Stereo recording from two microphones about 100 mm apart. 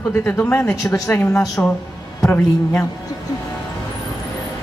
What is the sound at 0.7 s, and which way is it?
Speech, 30° left (ahead or behind).